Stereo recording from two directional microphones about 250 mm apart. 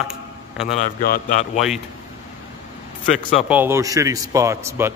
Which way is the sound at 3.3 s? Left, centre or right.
Centre.